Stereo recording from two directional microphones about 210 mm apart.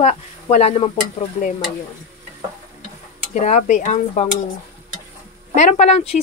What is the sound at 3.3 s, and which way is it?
Speech, 35° left (ahead or behind).